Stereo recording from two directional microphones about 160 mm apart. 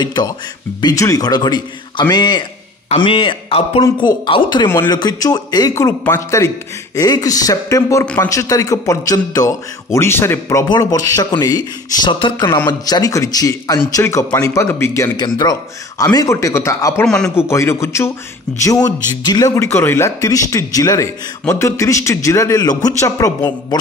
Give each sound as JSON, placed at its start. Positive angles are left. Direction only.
{"t": 0.0, "sound": "a man's voice", "side_deg": 25}
{"t": 8.0, "sound": "a man's voice", "side_deg": 5}
{"t": 8.3, "sound": "speech", "side_deg": 20}
{"t": 17.0, "sound": "a man's voice", "side_deg": 5}
{"t": 17.5, "sound": "a man's voice", "side_deg": 15}